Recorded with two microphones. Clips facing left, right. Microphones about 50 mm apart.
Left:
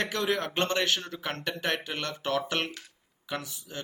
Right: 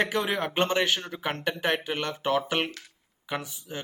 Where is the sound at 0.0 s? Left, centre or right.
Centre.